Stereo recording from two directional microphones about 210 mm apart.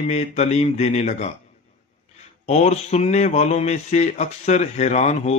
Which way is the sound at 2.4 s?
30° left (ahead or behind).